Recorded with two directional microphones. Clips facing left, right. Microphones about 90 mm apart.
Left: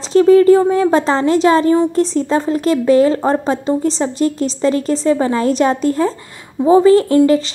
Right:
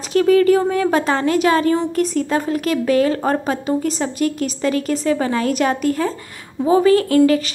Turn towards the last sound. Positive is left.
turn(degrees=30)  # may be behind; listen again after turning